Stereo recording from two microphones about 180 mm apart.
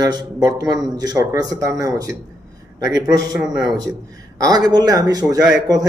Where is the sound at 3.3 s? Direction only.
5° right (ahead or behind).